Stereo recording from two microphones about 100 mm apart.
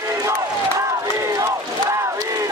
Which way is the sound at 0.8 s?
30° right (ahead or behind).